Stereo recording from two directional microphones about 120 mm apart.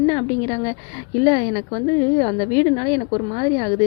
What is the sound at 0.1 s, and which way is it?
A woman's voice, 35° left (ahead or behind).